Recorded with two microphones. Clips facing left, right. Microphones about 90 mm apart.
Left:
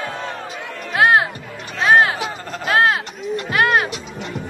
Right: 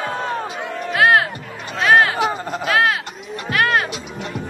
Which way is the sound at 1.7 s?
25° left (ahead or behind).